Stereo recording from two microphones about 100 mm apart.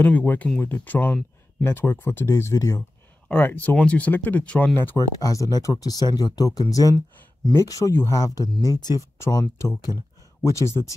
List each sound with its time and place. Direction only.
0.0 s speech: 15° left (ahead or behind); by 2.8 s 35° left (ahead or behind)
3.3 s speech: 15° left (ahead or behind)
4.9 s speech: 35° left (ahead or behind)
8.5 s speech: 40° left (ahead or behind)